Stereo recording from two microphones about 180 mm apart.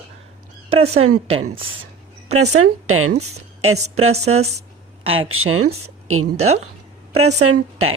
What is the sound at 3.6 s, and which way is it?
Speech, 35° right (ahead or behind).